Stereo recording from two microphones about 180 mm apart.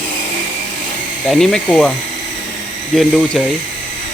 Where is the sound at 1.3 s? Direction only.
5° left (ahead or behind).